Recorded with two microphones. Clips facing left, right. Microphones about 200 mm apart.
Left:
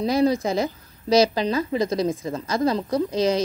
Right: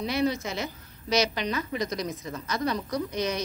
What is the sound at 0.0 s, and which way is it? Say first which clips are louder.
A woman's voice: left 7 dB; 35° left (ahead or behind).